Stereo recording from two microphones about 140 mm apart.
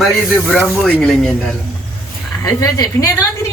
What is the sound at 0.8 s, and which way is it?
Speech, 10° left (ahead or behind).